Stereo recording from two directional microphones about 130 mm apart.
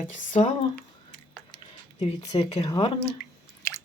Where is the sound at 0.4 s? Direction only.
60° left (ahead or behind).